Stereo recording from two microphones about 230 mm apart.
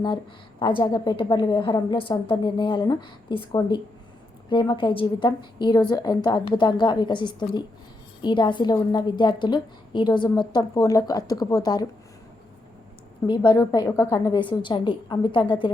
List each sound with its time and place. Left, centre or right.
0.6 s a woman's voice: left
13.2 s a woman's voice: centre